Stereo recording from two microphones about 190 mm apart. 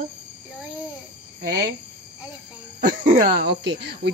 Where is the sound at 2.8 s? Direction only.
45° right (ahead or behind).